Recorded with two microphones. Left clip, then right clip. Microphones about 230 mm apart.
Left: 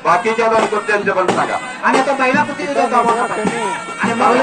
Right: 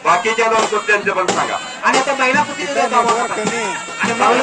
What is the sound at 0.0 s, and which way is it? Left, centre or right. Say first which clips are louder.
Speech: even; right.